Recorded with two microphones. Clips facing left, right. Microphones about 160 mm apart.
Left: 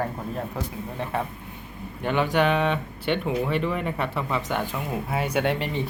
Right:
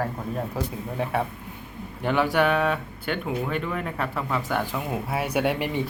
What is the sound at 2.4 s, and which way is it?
Speech, 5° right (ahead or behind).